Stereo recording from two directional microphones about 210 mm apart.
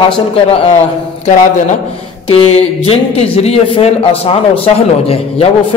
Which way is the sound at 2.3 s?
25° left (ahead or behind).